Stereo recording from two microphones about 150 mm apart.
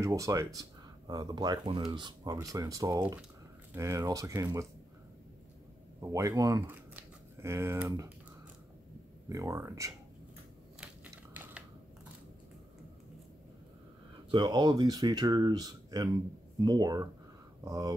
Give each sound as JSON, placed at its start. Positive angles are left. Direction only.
{"t": 0.0, "sound": "speech", "side_deg": -20}
{"t": 5.9, "sound": "speech", "side_deg": -20}
{"t": 9.3, "sound": "speech", "side_deg": -20}
{"t": 14.3, "sound": "speech", "side_deg": -30}